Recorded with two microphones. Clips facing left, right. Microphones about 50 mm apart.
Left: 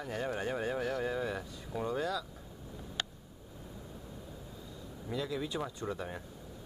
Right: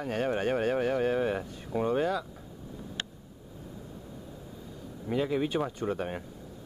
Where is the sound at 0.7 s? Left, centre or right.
Right.